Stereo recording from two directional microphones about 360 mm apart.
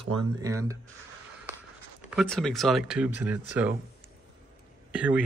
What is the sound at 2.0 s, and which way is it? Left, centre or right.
Speech, centre.